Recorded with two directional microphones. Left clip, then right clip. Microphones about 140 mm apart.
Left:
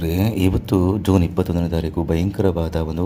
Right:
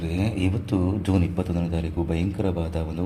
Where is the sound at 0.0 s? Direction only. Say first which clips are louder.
Left 6 dB; 40° left (ahead or behind).